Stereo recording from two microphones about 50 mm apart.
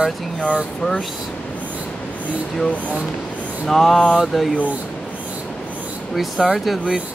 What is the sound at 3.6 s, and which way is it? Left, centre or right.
Speech, centre.